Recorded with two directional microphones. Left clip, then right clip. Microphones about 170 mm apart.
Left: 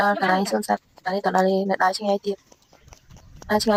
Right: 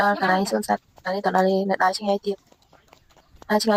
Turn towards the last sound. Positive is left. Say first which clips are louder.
# even
turn(degrees=0)  # may be behind; listen again after turning